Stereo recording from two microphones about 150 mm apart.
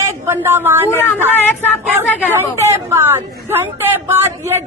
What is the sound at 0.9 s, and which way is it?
Speech, 15° left (ahead or behind).